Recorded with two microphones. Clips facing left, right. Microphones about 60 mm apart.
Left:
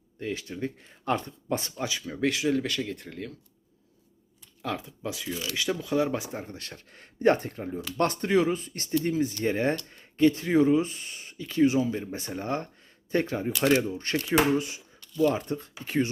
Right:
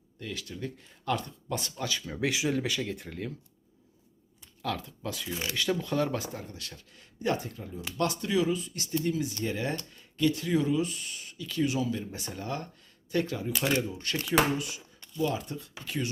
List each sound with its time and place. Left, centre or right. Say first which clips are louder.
0.2 s speech: left 5 dB; left
1.8 s speech: left 2 dB; centre
2.1 s speech: left 4 dB; centre
4.6 s speech: left 1 dB; centre
6.3 s speech: left 4 dB; left